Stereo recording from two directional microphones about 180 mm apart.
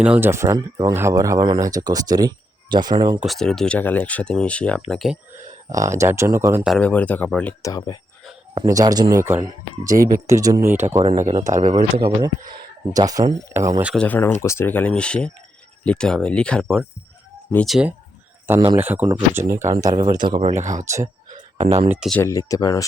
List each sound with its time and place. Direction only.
0.0 s speech: 10° right (ahead or behind)
3.2 s speech: centre (ahead or behind)
5.7 s speech: 15° right (ahead or behind)
6.7 s speech: 5° left (ahead or behind)
7.6 s speech: 20° left (ahead or behind)
8.5 s speech: 20° right (ahead or behind)
11.7 s speech: 30° right (ahead or behind)
13.9 s speech: 10° left (ahead or behind)
18.4 s speech: 15° right (ahead or behind)
20.6 s speech: 45° right (ahead or behind)
20.8 s speech: 15° right (ahead or behind)
21.3 s a sound: 35° right (ahead or behind)
21.8 s speech: centre (ahead or behind)
22.2 s speech: 15° left (ahead or behind)